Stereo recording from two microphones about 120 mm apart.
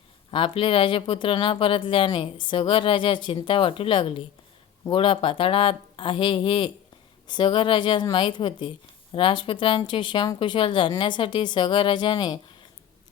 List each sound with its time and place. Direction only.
0.3 s speech: 45° left (ahead or behind)